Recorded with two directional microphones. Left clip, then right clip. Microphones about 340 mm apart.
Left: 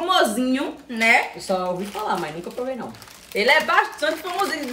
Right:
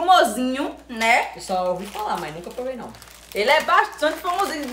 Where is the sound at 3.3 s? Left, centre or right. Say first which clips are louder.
Even; centre.